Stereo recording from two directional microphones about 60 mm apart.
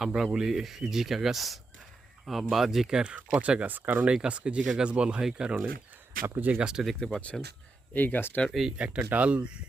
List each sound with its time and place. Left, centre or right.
0.0 s speech: centre; by 4.1 s right
4.1 s speech: centre
6.2 s speech: right
6.6 s speech: centre
7.0 s speech: centre
7.9 s speech: left
8.8 s speech: centre